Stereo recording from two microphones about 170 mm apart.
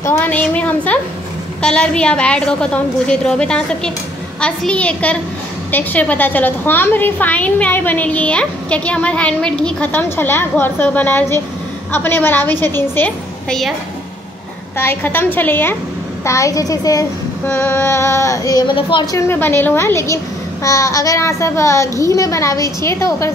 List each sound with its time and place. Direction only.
0.0 s a woman's voice: 10° left (ahead or behind)
14.8 s a woman's voice: 10° left (ahead or behind)
17.5 s a woman's voice: 10° left (ahead or behind); by 19.0 s 30° left (ahead or behind)
19.1 s a woman's voice: 15° left (ahead or behind)